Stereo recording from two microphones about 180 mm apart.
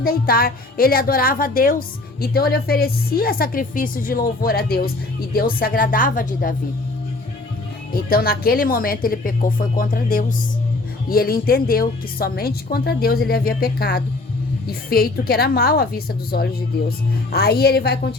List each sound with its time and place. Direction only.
0.0 s a woman's voice: 55° left (ahead or behind)
7.9 s a woman's voice: 55° left (ahead or behind)